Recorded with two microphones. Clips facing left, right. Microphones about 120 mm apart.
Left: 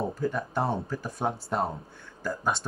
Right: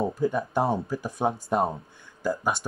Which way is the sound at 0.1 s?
15° right (ahead or behind).